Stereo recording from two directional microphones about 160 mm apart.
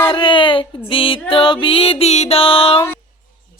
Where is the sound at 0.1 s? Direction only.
30° left (ahead or behind).